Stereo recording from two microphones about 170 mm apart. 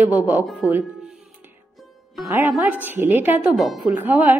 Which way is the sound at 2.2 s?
15° right (ahead or behind).